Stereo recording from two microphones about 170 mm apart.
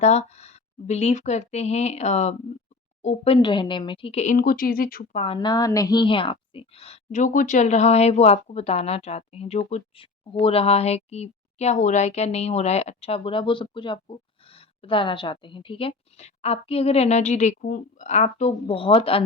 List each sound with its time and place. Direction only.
0.0 s a woman's voice: 40° left (ahead or behind); by 5.0 s 60° left (ahead or behind)
5.1 s a woman's voice: 35° left (ahead or behind)